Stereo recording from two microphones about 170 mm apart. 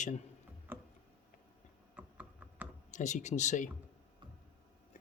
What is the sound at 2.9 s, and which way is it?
Speech, 45° left (ahead or behind).